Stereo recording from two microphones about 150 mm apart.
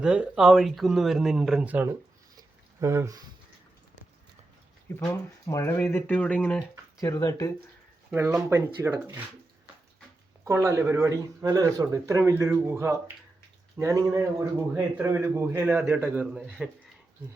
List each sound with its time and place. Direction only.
0.0 s speech: 5° right (ahead or behind); by 3.2 s 20° right (ahead or behind)
5.5 s speech: 20° left (ahead or behind)
7.0 s speech: 25° left (ahead or behind)
8.1 s speech: 15° right (ahead or behind)
10.4 s speech: 20° right (ahead or behind)